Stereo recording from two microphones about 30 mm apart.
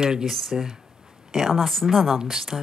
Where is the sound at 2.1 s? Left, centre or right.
Centre.